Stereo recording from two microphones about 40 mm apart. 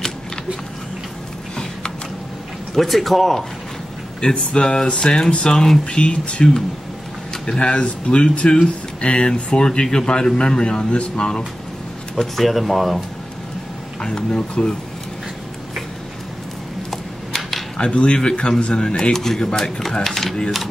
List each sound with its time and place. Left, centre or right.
2.7 s speech: centre
4.2 s speech: left
12.2 s speech: centre
14.0 s speech: left
16.9 s a sound: centre
17.7 s speech: left; by 20.3 s centre